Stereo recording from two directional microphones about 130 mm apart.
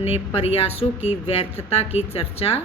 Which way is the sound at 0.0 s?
50° left (ahead or behind).